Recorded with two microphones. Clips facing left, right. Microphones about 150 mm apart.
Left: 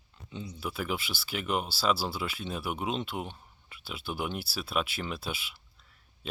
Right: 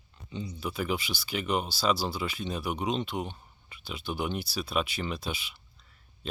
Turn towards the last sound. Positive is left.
turn(degrees=5)  # may be behind; listen again after turning